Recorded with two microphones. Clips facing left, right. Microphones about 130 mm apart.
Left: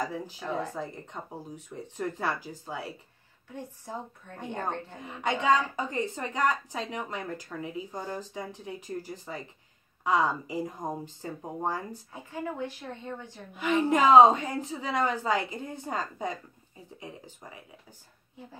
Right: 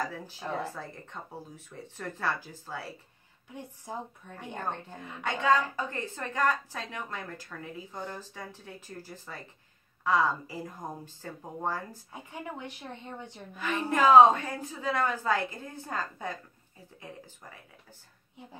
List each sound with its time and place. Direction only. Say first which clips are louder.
0.0 s a woman's voice: left 2 dB; 15° left (ahead or behind)
4.4 s a woman's voice: left 3 dB; 15° left (ahead or behind)
12.1 s a woman's voice: left 5 dB; 15° right (ahead or behind)
13.6 s a woman's voice: left 3 dB; 15° left (ahead or behind)